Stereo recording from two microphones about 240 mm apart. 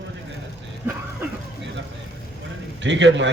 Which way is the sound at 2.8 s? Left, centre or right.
Right.